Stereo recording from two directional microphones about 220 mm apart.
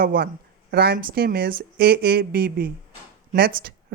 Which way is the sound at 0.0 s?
40° right (ahead or behind).